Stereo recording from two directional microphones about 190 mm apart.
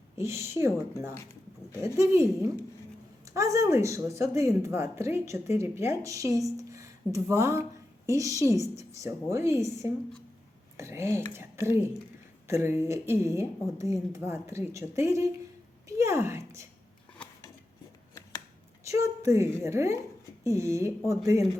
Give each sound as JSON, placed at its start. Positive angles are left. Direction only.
{"t": 0.2, "sound": "speech", "side_deg": -15}
{"t": 10.8, "sound": "speech", "side_deg": -15}
{"t": 12.5, "sound": "speech", "side_deg": -15}
{"t": 18.1, "sound": "a sound", "side_deg": 15}
{"t": 18.9, "sound": "a woman's voice", "side_deg": -15}